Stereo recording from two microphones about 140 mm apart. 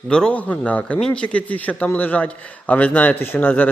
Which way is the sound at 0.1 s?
5° left (ahead or behind).